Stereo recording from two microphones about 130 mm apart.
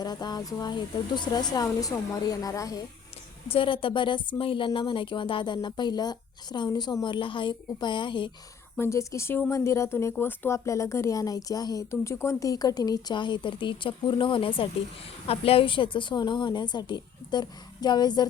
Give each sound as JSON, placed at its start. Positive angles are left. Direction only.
{"t": 0.0, "sound": "speech", "side_deg": 30}
{"t": 3.5, "sound": "speech", "side_deg": 45}
{"t": 8.8, "sound": "speech", "side_deg": 20}